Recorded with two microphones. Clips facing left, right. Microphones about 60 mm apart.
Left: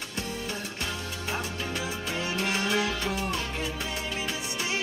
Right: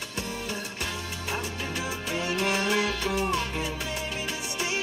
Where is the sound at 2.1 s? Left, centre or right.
Right.